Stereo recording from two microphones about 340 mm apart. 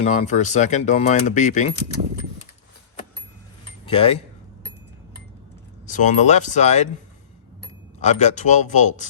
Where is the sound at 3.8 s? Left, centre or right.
Centre.